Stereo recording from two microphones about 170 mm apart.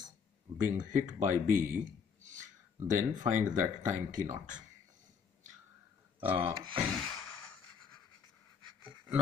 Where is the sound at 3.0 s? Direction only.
50° right (ahead or behind).